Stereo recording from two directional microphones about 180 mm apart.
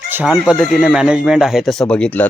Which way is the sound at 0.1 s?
10° right (ahead or behind).